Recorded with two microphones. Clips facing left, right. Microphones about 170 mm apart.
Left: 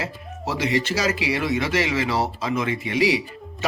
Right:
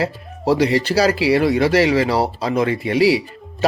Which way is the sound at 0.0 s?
35° right (ahead or behind).